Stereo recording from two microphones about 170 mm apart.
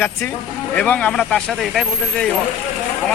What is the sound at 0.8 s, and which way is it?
A man's voice, 5° left (ahead or behind).